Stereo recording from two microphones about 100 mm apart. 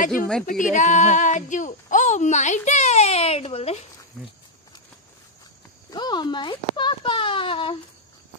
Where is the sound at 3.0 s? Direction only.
90° left.